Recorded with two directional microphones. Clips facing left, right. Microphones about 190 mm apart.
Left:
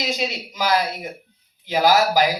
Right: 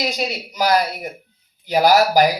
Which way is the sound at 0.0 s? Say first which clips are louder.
Right 2 dB; 45° right (ahead or behind).